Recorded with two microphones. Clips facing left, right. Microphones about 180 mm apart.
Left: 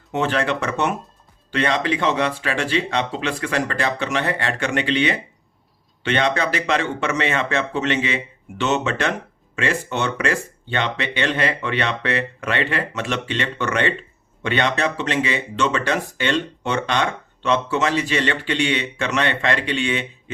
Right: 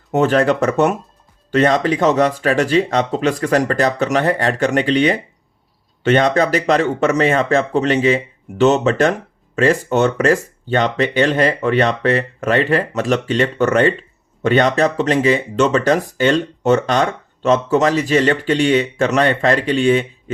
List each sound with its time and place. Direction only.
0.1 s speech: 45° right (ahead or behind)